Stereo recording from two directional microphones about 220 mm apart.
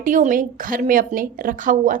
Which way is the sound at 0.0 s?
35° right (ahead or behind).